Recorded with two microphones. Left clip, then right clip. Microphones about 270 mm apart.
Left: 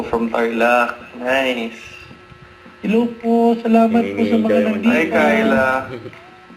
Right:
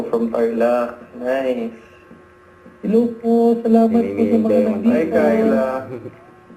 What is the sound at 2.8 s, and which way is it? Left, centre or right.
A man's voice, centre.